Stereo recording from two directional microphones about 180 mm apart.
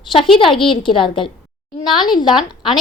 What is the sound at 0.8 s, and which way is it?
Speech, 30° left (ahead or behind).